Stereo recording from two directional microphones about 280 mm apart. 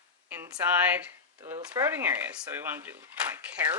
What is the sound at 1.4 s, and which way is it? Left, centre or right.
Speech, centre.